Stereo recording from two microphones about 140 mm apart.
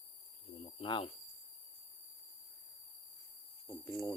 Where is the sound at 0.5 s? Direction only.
45° left (ahead or behind).